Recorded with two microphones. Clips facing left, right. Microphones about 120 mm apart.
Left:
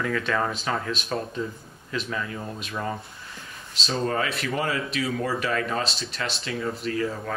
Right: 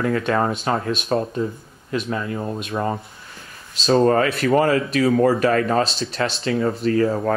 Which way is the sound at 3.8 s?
50° right (ahead or behind).